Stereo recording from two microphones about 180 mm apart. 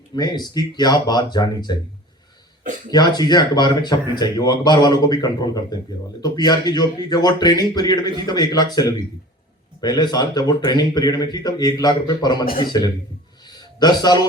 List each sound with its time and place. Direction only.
0.2 s speech: 20° left (ahead or behind)
2.9 s speech: 25° left (ahead or behind)
13.4 s a sound: 25° left (ahead or behind)